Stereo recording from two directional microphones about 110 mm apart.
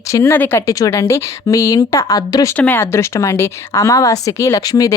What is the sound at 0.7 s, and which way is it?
A woman's voice, 30° left (ahead or behind).